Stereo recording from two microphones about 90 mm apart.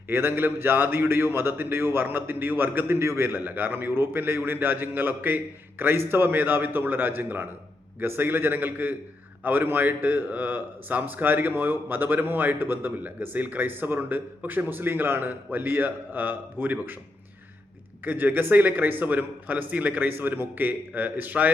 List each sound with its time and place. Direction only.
0.1 s a man's voice: 25° right (ahead or behind)
18.0 s a man's voice: 20° right (ahead or behind)